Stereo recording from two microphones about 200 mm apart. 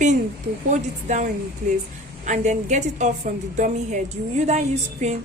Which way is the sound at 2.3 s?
35° right (ahead or behind).